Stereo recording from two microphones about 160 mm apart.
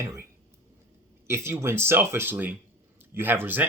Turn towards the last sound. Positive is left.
turn(degrees=-10)  # may be behind; listen again after turning